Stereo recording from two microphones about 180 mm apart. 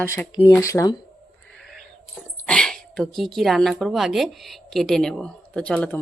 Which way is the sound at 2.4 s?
5° left (ahead or behind).